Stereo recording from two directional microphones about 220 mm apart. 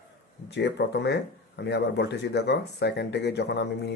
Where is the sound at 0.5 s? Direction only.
50° left (ahead or behind).